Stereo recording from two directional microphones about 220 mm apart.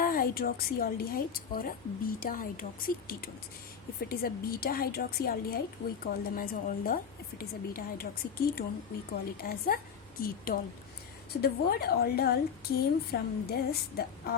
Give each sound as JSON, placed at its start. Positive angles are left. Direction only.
{"t": 0.0, "sound": "a woman's voice", "side_deg": 40}